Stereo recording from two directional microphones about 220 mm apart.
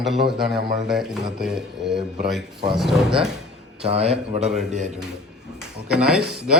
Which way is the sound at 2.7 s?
Centre (ahead or behind).